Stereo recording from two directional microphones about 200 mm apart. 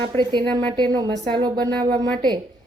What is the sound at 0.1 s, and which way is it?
A woman's voice, 25° right (ahead or behind).